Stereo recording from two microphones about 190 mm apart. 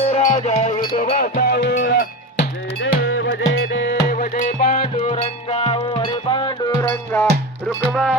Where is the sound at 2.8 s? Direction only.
90° left; by 4.0 s 65° left (ahead or behind).